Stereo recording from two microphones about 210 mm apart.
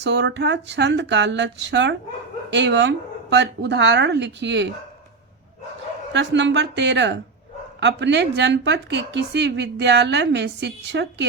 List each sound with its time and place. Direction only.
0.0 s a woman's voice: 55° right (ahead or behind)
6.1 s a woman's voice: 55° right (ahead or behind)